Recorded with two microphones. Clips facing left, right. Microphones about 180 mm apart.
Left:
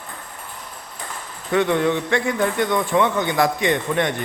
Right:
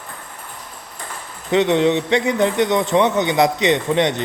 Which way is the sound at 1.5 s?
20° right (ahead or behind).